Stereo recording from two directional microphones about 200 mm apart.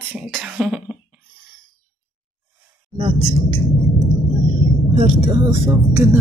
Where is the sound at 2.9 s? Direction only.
25° right (ahead or behind).